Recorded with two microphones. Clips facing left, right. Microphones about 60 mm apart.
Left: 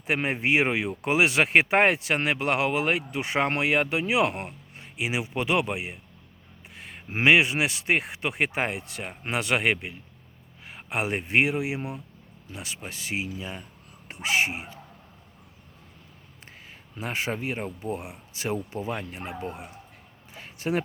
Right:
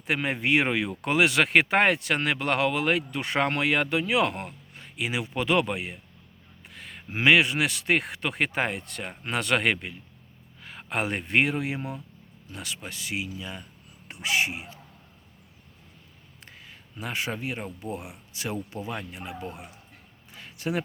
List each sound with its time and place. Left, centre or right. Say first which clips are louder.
0.1 s speech: even; left
7.1 s speech: left 1 dB; left
17.0 s speech: left 2 dB; left
20.3 s a sound: left 2 dB; left